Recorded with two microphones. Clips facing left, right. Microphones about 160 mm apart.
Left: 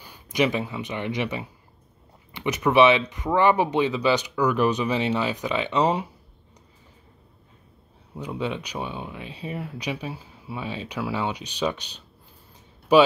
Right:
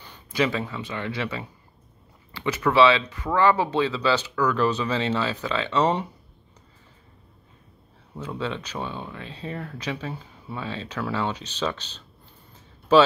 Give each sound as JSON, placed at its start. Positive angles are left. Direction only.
{"t": 0.0, "sound": "speech", "side_deg": 15}
{"t": 8.1, "sound": "speech", "side_deg": 15}